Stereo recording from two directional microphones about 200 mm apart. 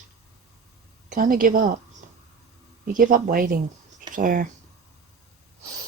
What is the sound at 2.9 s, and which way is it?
Speech, 45° right (ahead or behind).